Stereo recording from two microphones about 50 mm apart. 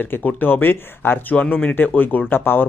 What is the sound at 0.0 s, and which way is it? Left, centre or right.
Speech, left.